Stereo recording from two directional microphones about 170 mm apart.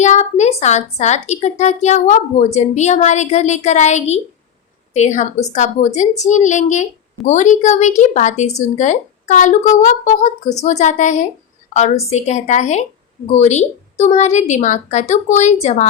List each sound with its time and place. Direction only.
0.0 s a woman's voice: 40° left (ahead or behind)